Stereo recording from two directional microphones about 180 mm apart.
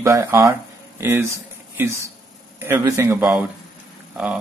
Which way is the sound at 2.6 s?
15° right (ahead or behind).